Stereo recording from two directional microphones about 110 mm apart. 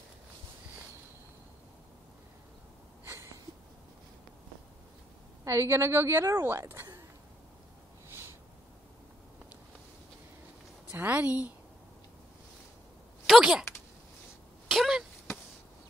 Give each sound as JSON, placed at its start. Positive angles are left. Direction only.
{"t": 5.4, "sound": "a woman's voice", "side_deg": -25}
{"t": 10.9, "sound": "a woman's voice", "side_deg": -15}
{"t": 13.4, "sound": "a woman's voice", "side_deg": -5}
{"t": 14.7, "sound": "a sound", "side_deg": -5}